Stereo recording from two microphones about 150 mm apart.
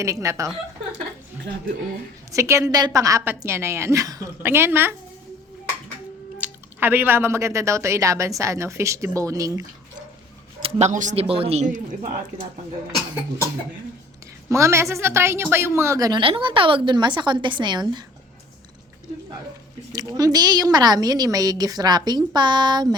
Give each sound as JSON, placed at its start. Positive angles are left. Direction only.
{"t": 0.0, "sound": "a woman's voice", "side_deg": -20}
{"t": 2.3, "sound": "a woman's voice", "side_deg": -20}
{"t": 6.4, "sound": "a woman's voice", "side_deg": -15}
{"t": 10.6, "sound": "speech", "side_deg": -50}
{"t": 14.5, "sound": "a woman's voice", "side_deg": -20}
{"t": 16.2, "sound": "a woman's voice", "side_deg": -35}
{"t": 19.9, "sound": "a woman's voice", "side_deg": -25}